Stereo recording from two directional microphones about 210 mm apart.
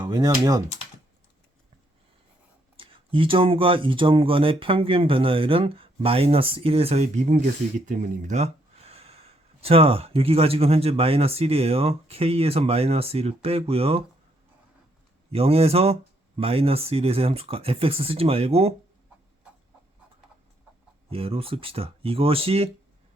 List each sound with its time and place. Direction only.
0.0 s speech: 20° right (ahead or behind)
2.7 s speech: 25° right (ahead or behind)
15.3 s speech: 30° right (ahead or behind)
21.1 s speech: 25° right (ahead or behind)